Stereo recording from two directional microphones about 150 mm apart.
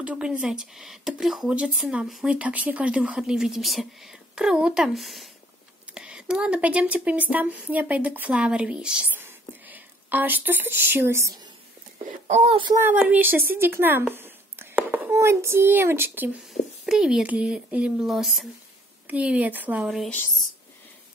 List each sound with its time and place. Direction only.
0.0 s speech: 10° right (ahead or behind); by 11.5 s 25° right (ahead or behind)
12.3 s a child's voice: 50° right (ahead or behind)
12.7 s speech: 15° right (ahead or behind)
16.4 s speech: 5° right (ahead or behind)